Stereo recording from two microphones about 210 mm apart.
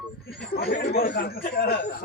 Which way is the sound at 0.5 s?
50° left (ahead or behind).